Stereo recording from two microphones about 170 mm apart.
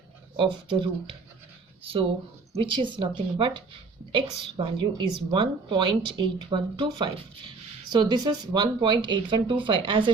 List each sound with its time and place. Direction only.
0.3 s speech: 30° right (ahead or behind)
2.6 s speech: 30° right (ahead or behind)